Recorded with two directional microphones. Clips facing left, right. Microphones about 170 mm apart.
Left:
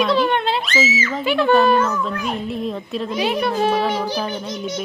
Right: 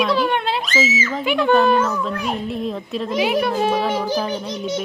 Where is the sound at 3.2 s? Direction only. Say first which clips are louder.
Right 1 dB; 15° right (ahead or behind).